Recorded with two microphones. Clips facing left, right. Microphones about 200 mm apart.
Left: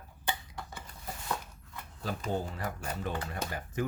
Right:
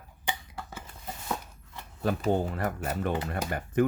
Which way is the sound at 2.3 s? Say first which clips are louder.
Right 6 dB; 60° right (ahead or behind).